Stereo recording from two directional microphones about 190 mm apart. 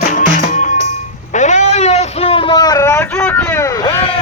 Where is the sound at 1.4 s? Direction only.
40° left (ahead or behind); by 3.0 s 15° left (ahead or behind).